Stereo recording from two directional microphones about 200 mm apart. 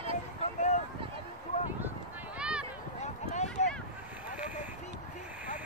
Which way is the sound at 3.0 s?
35° left (ahead or behind).